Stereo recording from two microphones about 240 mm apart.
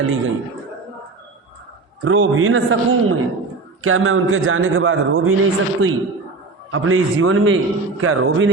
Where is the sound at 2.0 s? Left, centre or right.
Right.